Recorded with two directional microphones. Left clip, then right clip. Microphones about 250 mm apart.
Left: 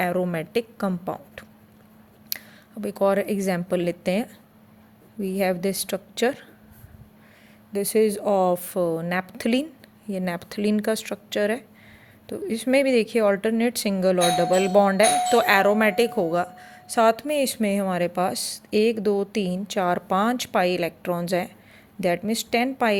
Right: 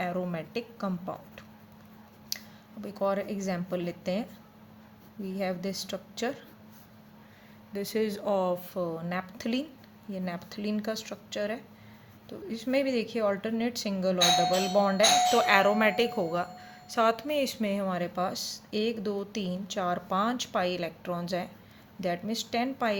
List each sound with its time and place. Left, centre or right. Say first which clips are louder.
0.0 s speech: left 8 dB; left
2.3 s a sound: left 3 dB; left
2.8 s speech: left 8 dB; left
7.7 s speech: left 10 dB; left